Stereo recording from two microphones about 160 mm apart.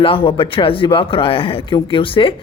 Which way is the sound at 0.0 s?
35° left (ahead or behind).